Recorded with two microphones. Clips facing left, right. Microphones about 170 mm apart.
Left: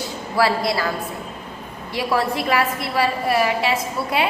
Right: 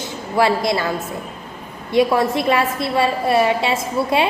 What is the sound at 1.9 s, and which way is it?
A woman's voice, 20° right (ahead or behind).